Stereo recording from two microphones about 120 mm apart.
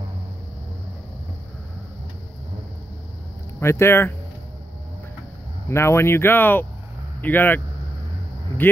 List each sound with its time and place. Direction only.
3.5 s speech: 20° left (ahead or behind)
5.7 s speech: 20° left (ahead or behind)